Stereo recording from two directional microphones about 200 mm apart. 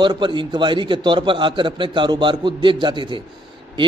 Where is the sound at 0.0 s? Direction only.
25° right (ahead or behind).